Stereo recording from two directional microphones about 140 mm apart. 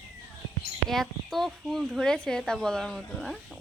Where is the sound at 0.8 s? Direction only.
Centre (ahead or behind).